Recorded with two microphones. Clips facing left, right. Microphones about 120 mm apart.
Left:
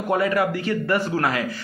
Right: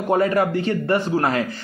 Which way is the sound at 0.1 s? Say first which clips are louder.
Right 3 dB; 30° right (ahead or behind).